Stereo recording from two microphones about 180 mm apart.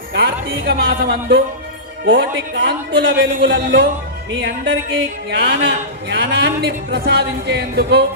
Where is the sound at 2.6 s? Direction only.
90° right.